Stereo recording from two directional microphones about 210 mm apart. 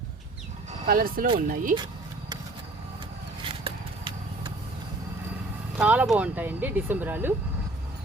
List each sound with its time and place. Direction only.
0.7 s speech: 45° right (ahead or behind)
3.4 s a sound: 25° right (ahead or behind)
5.7 s speech: 5° right (ahead or behind)